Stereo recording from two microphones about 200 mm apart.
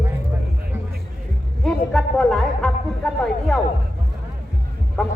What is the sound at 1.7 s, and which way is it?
A man's voice, 5° left (ahead or behind).